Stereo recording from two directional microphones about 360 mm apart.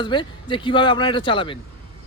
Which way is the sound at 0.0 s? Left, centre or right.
Centre.